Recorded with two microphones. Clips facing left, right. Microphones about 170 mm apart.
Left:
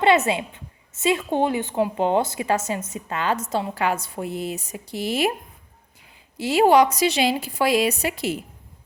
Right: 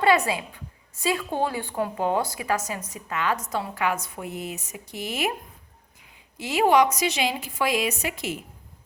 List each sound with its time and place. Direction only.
0.0 s a woman's voice: 25° left (ahead or behind)
6.3 s a woman's voice: 35° left (ahead or behind)